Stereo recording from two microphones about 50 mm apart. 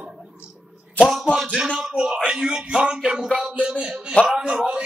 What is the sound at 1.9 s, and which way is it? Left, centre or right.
Speech, centre.